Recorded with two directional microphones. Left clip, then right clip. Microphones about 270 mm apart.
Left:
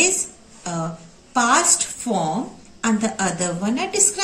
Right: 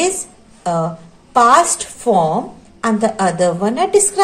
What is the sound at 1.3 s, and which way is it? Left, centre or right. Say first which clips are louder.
Speech: right 7 dB; right.